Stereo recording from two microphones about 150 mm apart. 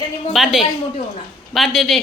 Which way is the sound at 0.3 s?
Centre (ahead or behind).